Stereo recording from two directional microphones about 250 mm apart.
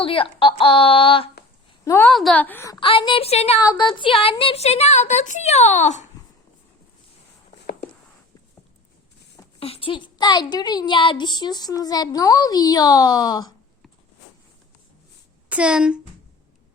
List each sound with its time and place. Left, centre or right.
0.0 s speech: left
1.8 s speech: centre
2.8 s speech: centre
9.6 s speech: left
15.4 s a woman's voice: centre